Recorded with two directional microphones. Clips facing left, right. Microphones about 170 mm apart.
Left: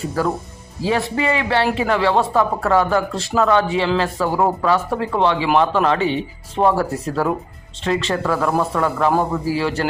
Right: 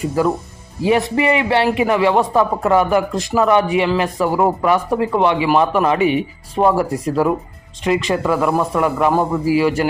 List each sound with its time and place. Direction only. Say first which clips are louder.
0.9 s speech: right 4 dB; 20° right (ahead or behind)